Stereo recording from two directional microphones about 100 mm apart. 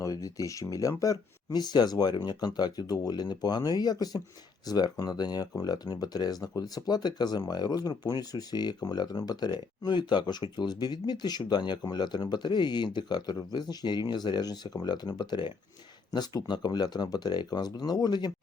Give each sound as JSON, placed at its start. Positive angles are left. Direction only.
{"t": 0.0, "sound": "speech", "side_deg": 35}